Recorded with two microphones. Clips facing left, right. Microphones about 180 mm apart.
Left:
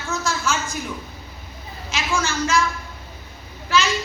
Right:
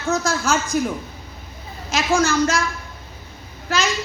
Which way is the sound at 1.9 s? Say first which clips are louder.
Right 6 dB; 40° right (ahead or behind).